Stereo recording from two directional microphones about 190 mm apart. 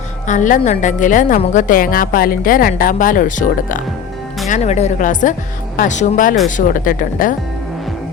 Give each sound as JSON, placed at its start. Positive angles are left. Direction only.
{"t": 0.3, "sound": "a woman's voice", "side_deg": 40}